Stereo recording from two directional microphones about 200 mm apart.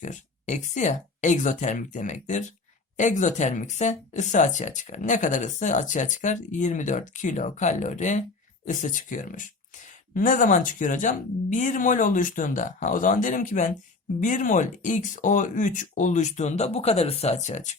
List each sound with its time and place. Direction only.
0.0 s speech: 35° left (ahead or behind)